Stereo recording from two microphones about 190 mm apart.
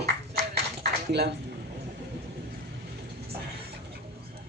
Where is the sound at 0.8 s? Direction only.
60° right (ahead or behind).